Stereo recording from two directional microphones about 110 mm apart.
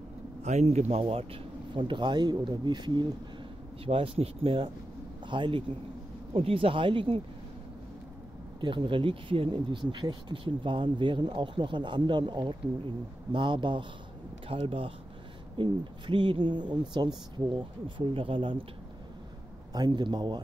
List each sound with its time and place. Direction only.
0.4 s speech: 85° right; by 3.1 s 40° right (ahead or behind)
3.8 s a man's voice: 60° right (ahead or behind)
8.5 s speech: 45° right (ahead or behind)
19.7 s a man's voice: 40° right (ahead or behind)